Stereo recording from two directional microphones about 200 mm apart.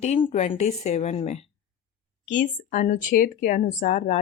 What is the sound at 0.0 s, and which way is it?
Speech, 30° left (ahead or behind).